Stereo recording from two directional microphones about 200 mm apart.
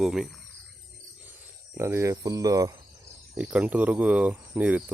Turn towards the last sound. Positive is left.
turn(degrees=-10)  # may be behind; listen again after turning